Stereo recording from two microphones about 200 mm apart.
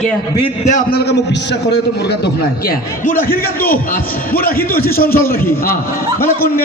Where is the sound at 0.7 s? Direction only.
40° left (ahead or behind).